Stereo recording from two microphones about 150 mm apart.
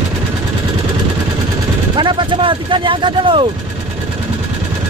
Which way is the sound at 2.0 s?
30° right (ahead or behind).